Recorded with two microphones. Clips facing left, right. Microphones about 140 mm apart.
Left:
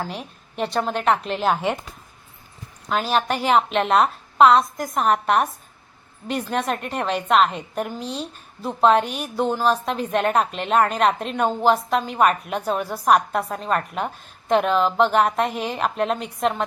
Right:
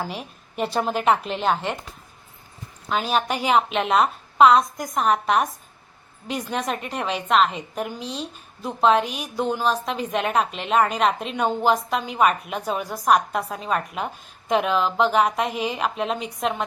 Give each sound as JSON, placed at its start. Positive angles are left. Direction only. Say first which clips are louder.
{"t": 0.0, "sound": "a woman's voice", "louder": "even", "side_deg": 0}
{"t": 2.9, "sound": "a woman's voice", "louder": "left 1 dB", "side_deg": 0}
{"t": 6.5, "sound": "a woman's voice", "louder": "left 2 dB", "side_deg": 0}
{"t": 7.9, "sound": "speech", "louder": "left 2 dB", "side_deg": 40}
{"t": 8.6, "sound": "a woman's voice", "louder": "left 2 dB", "side_deg": 0}